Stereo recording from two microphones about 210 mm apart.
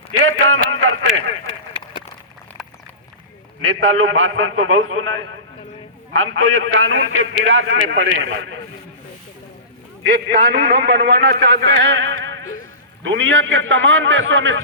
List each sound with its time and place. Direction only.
0.3 s a sound: 75° right (ahead or behind)
3.6 s a man's voice: 75° right (ahead or behind)
10.2 s a man's voice: 50° right (ahead or behind)